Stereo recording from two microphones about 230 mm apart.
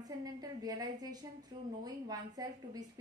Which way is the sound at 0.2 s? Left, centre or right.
Centre.